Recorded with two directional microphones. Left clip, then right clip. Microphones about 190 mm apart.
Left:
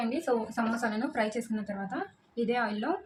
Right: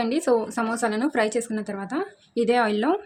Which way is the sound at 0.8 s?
60° right (ahead or behind).